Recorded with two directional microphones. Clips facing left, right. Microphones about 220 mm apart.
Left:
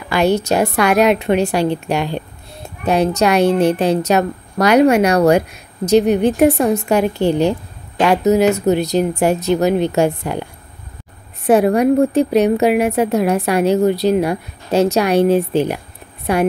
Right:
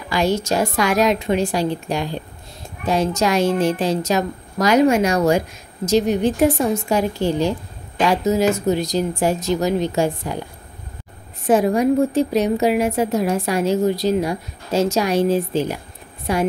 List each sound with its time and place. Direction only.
0.1 s a woman's voice: 65° left (ahead or behind)
11.4 s a woman's voice: 65° left (ahead or behind)